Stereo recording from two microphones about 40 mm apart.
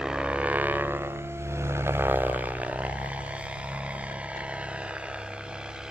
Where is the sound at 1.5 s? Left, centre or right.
Right.